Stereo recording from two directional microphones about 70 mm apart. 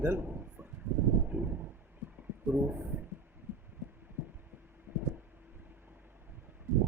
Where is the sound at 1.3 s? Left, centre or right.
Right.